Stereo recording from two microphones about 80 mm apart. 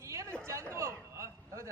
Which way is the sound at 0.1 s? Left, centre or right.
Right.